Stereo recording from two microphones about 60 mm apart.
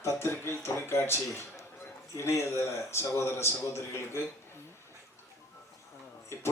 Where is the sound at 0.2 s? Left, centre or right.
Left.